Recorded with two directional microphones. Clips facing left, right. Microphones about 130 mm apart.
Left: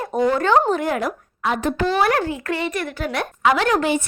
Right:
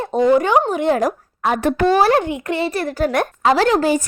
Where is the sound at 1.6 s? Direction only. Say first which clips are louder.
Right 6 dB; 60° right (ahead or behind).